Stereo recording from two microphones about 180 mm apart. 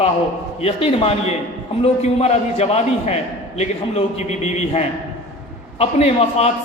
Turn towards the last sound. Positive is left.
turn(degrees=35)  # may be behind; listen again after turning